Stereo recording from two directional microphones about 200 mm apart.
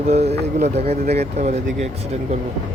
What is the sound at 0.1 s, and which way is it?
Speech, 30° right (ahead or behind).